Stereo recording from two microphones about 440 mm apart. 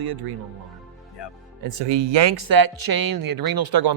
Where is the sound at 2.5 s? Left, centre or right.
Right.